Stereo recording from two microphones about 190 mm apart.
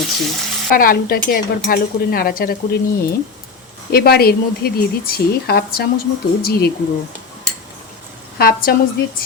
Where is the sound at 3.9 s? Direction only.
55° left (ahead or behind).